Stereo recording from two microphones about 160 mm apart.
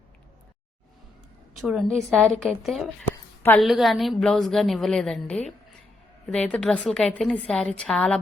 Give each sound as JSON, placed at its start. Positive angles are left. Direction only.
{"t": 1.5, "sound": "a woman's voice", "side_deg": 0}